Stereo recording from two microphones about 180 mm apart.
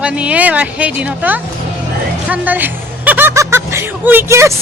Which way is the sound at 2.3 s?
10° right (ahead or behind).